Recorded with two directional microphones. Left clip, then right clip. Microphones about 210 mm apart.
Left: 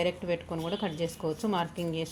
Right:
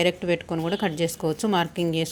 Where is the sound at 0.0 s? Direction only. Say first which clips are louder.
Right 7 dB; 35° right (ahead or behind).